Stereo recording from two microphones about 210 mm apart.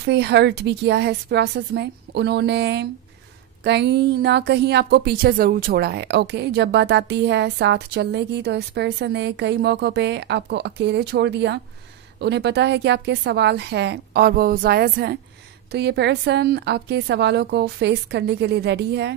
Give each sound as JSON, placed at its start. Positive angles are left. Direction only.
{"t": 0.0, "sound": "a woman's voice", "side_deg": -55}